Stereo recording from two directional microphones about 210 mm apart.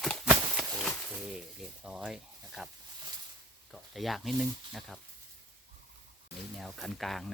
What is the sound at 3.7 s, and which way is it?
Speech, centre (ahead or behind).